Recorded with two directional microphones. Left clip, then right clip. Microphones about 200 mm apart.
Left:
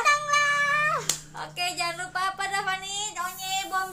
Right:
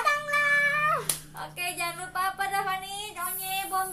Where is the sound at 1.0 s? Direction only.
45° left (ahead or behind).